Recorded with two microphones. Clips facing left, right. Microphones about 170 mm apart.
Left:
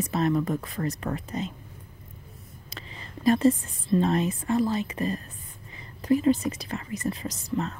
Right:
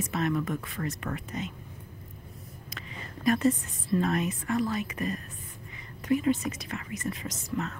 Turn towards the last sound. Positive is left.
turn(degrees=35)  # may be behind; listen again after turning